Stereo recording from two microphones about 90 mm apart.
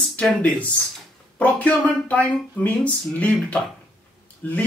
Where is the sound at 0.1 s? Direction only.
15° left (ahead or behind).